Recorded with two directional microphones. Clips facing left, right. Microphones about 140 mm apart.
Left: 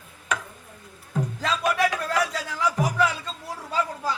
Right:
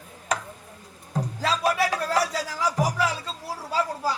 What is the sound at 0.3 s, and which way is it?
Tick-tock, 35° right (ahead or behind).